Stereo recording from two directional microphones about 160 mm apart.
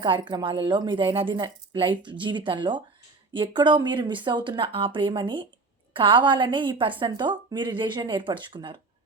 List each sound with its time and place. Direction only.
0.0 s a woman's voice: 30° right (ahead or behind)